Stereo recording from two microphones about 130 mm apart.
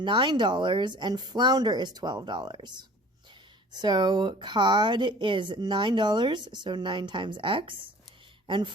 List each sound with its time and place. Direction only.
0.0 s a woman's voice: 35° right (ahead or behind)